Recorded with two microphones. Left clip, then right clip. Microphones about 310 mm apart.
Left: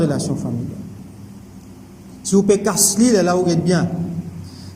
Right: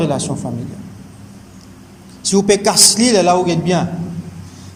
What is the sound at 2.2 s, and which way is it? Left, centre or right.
A man's voice, centre.